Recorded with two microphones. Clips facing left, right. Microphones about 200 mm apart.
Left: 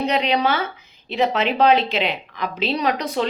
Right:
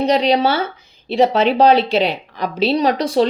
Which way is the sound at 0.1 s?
35° right (ahead or behind).